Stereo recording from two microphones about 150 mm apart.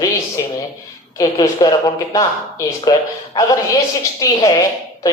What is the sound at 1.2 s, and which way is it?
Speech, 25° left (ahead or behind).